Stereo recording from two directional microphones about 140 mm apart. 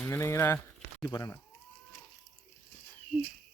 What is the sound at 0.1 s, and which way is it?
Speech, 20° left (ahead or behind).